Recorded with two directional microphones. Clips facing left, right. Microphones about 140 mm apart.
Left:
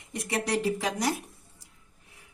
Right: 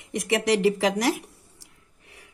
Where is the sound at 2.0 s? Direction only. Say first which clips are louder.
Right 6 dB; 75° right (ahead or behind).